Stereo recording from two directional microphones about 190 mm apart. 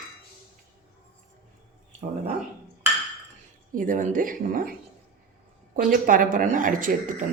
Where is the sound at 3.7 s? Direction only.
45° right (ahead or behind).